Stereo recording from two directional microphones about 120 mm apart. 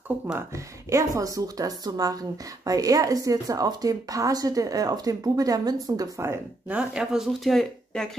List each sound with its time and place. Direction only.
0.8 s a woman's voice: 25° right (ahead or behind)
6.7 s speech: 5° right (ahead or behind)